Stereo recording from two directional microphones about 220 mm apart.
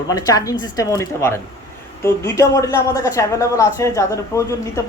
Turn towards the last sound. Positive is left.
turn(degrees=15)  # may be behind; listen again after turning